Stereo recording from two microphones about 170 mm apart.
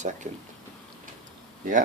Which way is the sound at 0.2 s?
45° right (ahead or behind).